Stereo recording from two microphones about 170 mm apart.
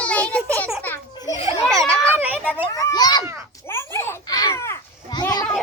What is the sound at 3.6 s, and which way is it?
Children playing, 15° left (ahead or behind).